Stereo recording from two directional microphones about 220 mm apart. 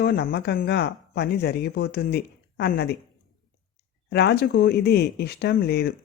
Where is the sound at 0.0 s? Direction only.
45° left (ahead or behind).